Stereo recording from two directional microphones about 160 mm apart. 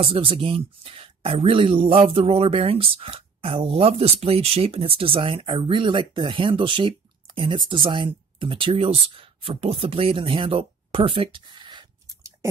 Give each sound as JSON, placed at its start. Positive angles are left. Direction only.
{"t": 0.0, "sound": "speech", "side_deg": -35}